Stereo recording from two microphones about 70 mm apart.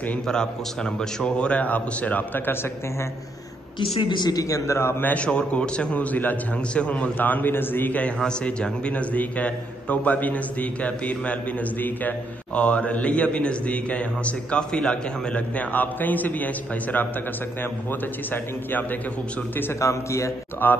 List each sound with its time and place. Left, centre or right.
0.3 s a man's voice: centre; by 2.7 s left
4.2 s a man's voice: left
5.0 s a man's voice: centre
8.2 s a man's voice: centre
18.3 s a man's voice: left
19.8 s a man's voice: left
20.6 s a man's voice: left